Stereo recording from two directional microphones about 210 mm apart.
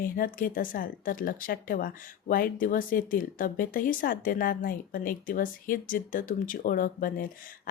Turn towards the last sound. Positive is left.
turn(degrees=40)  # may be behind; listen again after turning